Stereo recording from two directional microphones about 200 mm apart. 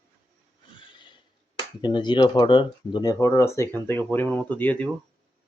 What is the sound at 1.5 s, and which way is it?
Speech, 25° left (ahead or behind).